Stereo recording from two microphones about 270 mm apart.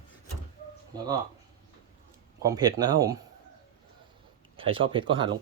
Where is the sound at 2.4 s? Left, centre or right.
Centre.